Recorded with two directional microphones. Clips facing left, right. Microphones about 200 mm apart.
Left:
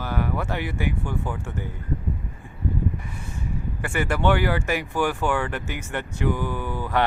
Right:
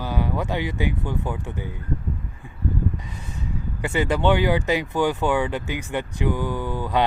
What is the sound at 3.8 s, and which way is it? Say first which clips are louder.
Speech: right 3 dB; 20° right (ahead or behind).